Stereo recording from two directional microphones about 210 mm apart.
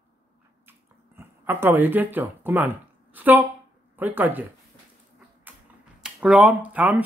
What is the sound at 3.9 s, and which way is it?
Speech, 10° right (ahead or behind).